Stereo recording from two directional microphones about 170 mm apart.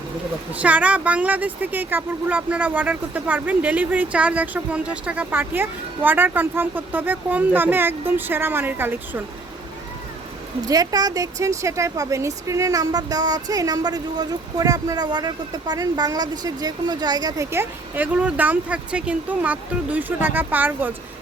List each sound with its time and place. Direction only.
0.5 s speech: 10° right (ahead or behind)
10.7 s speech: 20° right (ahead or behind)